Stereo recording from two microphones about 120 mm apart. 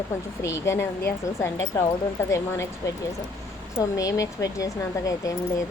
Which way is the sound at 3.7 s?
30° left (ahead or behind).